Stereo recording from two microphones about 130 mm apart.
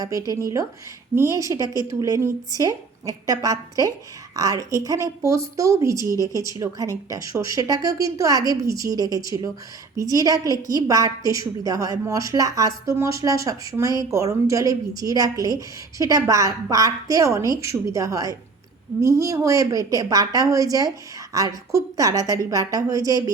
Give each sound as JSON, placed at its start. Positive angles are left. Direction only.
{"t": 0.0, "sound": "a woman's voice", "side_deg": -30}